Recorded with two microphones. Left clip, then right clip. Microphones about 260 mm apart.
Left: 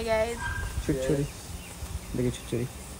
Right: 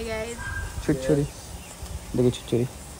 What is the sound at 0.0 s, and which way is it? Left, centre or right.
Speech, centre.